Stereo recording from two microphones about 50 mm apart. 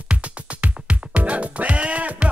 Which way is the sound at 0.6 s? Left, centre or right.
Right.